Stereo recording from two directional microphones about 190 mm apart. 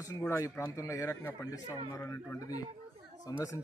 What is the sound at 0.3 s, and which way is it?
A man's voice, 15° left (ahead or behind).